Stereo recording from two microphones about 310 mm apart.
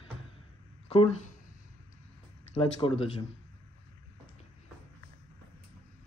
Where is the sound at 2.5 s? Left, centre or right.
Centre.